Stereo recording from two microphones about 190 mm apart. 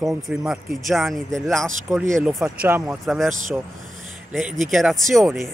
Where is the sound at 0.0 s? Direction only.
5° right (ahead or behind).